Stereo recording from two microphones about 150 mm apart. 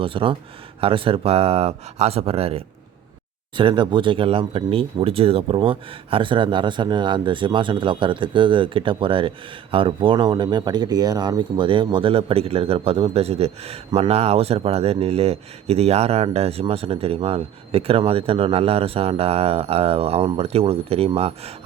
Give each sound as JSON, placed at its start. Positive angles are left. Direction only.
{"t": 0.0, "sound": "speech", "side_deg": -35}